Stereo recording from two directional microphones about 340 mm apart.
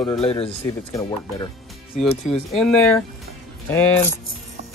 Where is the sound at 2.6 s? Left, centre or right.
Centre.